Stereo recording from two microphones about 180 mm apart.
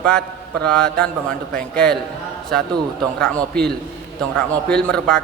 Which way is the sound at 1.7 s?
60° right (ahead or behind).